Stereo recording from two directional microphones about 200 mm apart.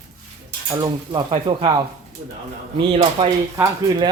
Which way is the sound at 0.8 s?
25° right (ahead or behind).